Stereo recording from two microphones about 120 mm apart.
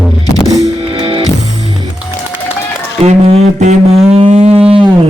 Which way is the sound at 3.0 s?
70° right (ahead or behind).